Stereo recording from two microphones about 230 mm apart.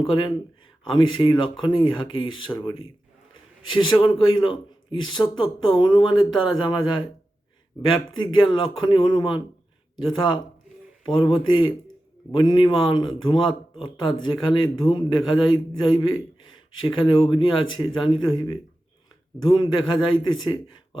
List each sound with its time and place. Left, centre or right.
0.0 s speech: centre